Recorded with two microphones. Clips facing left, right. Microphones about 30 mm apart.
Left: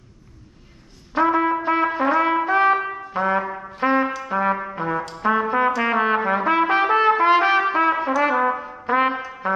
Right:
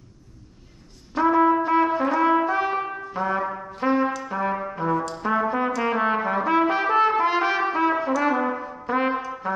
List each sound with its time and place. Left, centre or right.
1.1 s trumpet: centre